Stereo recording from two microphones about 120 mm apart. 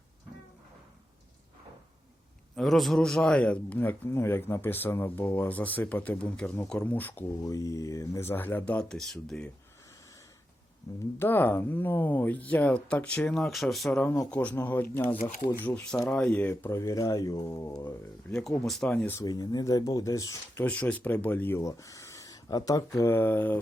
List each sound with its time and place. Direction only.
2.6 s a man's voice: centre (ahead or behind)
7.4 s a man's voice: 30° left (ahead or behind); by 9.5 s 5° left (ahead or behind)
10.9 s speech: 30° left (ahead or behind)
11.2 s a man's voice: 15° left (ahead or behind); by 14.0 s centre (ahead or behind)
14.3 s a man's voice: 10° left (ahead or behind)
15.2 s speech: 90° left
15.5 s a man's voice: 15° left (ahead or behind); by 17.8 s 30° left (ahead or behind)
18.3 s speech: 5° left (ahead or behind)
19.2 s speech: 35° left (ahead or behind)
20.7 s speech: 10° left (ahead or behind); by 22.8 s 30° left (ahead or behind)
23.0 s a man's voice: 20° left (ahead or behind)